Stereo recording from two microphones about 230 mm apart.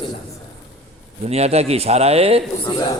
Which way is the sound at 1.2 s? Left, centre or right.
Right.